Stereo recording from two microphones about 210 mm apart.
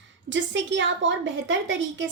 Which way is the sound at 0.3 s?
60° right (ahead or behind).